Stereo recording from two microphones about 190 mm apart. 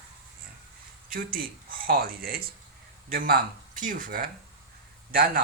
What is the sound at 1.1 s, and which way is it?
Speech, 50° right (ahead or behind).